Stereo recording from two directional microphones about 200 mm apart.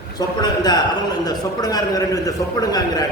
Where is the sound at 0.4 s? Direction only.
20° left (ahead or behind).